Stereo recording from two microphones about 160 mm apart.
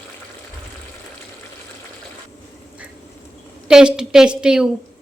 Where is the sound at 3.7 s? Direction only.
5° right (ahead or behind).